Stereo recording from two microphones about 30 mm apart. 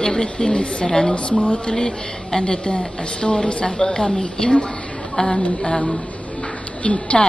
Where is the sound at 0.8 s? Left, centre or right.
Centre.